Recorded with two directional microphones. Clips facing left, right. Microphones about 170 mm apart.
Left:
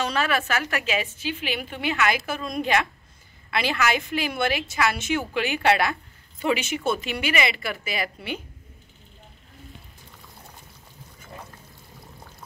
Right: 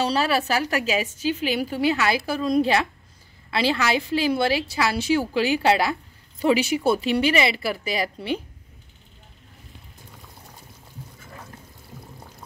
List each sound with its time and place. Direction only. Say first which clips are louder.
0.0 s a woman's voice: right 3 dB; 35° right (ahead or behind)
7.5 s a woman's voice: right 4 dB; centre (ahead or behind)
7.8 s a woman's voice: right 4 dB; 35° right (ahead or behind)